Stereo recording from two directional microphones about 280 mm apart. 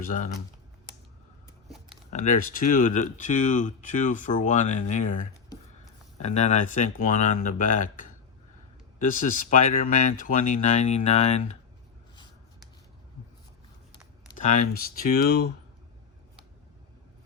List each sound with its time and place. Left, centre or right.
0.0 s speech: left
2.0 s speech: left
6.1 s speech: left
14.3 s speech: left